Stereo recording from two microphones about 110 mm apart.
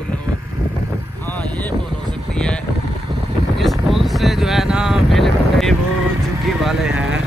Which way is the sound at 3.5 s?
Centre (ahead or behind).